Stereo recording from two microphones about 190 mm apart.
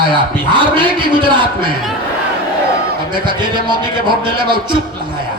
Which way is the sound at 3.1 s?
25° right (ahead or behind).